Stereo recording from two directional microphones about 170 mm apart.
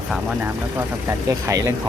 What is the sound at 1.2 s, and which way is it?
Speech, 20° right (ahead or behind).